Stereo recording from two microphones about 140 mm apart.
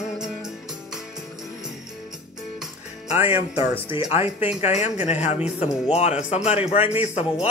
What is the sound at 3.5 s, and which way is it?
A man's voice, 45° left (ahead or behind).